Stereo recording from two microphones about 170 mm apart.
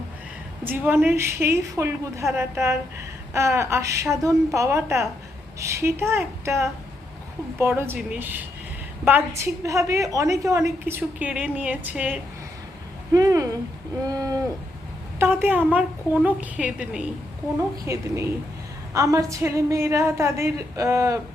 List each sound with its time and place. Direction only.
0.6 s a woman's voice: 10° right (ahead or behind)
13.1 s a sound: 20° right (ahead or behind)
15.2 s a woman's voice: 10° right (ahead or behind)
17.8 s a woman's voice: 15° right (ahead or behind)